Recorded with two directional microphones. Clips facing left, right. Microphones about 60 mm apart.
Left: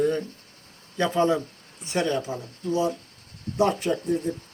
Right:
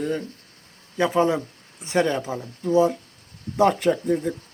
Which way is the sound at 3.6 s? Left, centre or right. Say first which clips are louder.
Right 7 dB; right.